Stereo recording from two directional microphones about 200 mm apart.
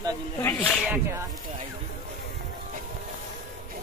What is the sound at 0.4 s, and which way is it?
Snake, 5° left (ahead or behind).